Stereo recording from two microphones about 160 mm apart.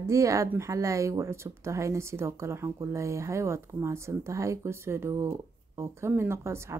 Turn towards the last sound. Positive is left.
turn(degrees=-15)  # may be behind; listen again after turning